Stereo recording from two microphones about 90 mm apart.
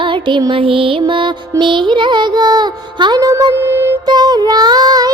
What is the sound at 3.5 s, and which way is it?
Music, 25° right (ahead or behind).